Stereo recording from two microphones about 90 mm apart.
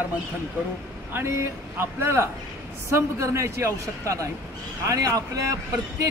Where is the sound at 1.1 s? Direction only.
25° right (ahead or behind).